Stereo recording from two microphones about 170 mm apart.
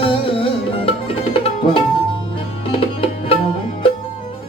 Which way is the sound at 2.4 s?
35° left (ahead or behind).